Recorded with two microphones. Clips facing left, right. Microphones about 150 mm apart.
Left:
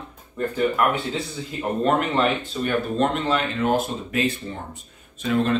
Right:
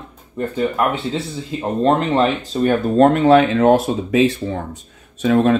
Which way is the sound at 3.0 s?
60° right (ahead or behind).